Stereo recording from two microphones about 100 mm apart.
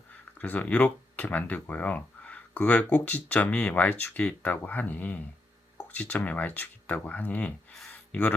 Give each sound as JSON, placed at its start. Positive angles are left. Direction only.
{"t": 0.3, "sound": "speech", "side_deg": 15}